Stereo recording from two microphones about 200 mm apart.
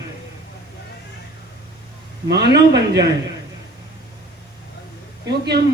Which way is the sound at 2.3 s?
55° right (ahead or behind).